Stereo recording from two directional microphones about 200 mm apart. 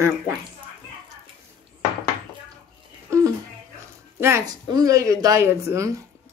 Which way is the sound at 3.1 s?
15° right (ahead or behind).